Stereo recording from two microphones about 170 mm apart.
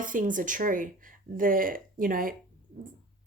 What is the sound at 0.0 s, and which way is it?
Speech, 50° right (ahead or behind).